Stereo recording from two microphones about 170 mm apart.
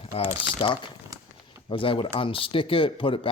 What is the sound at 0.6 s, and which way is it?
Speech, 30° left (ahead or behind).